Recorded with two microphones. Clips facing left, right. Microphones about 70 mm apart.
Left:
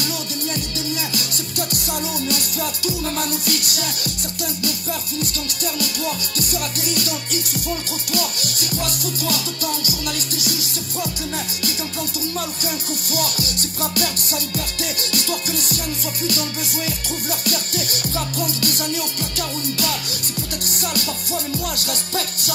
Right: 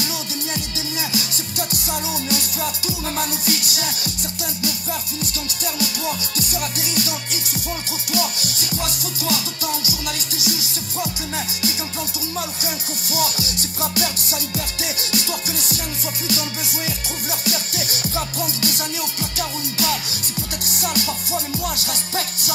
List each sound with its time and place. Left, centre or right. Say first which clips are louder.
1.7 s music: even; left
3.4 s music: even; left
6.3 s music: even; left
13.1 s music: right 2 dB; left
16.3 s music: left 1 dB; left
20.9 s music: right 2 dB; left